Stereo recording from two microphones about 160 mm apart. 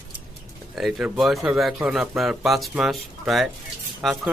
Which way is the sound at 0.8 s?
Centre (ahead or behind).